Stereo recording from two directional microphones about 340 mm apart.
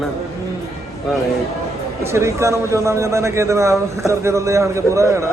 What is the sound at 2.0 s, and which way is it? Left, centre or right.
A man's voice, centre.